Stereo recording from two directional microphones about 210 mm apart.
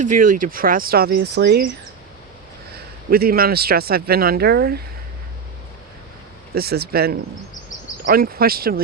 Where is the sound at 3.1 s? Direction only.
45° right (ahead or behind).